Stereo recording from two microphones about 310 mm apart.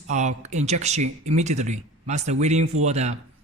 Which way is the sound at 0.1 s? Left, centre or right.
Right.